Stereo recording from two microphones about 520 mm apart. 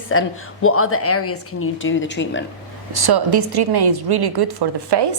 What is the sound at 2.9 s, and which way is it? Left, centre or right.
A woman's voice, right.